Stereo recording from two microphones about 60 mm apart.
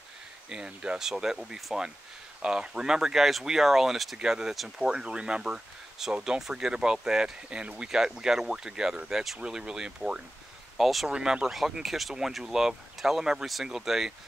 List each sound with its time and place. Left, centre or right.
0.5 s speech: centre
10.8 s speech: centre
11.1 s speech: centre